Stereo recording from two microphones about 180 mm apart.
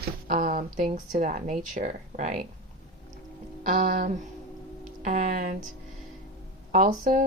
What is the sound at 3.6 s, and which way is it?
Speech, 45° right (ahead or behind).